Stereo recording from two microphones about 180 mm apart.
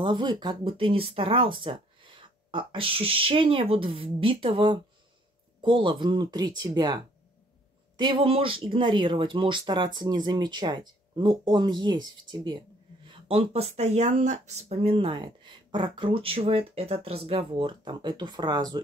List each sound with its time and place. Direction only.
0.0 s speech: 25° right (ahead or behind)
8.0 s speech: 30° right (ahead or behind)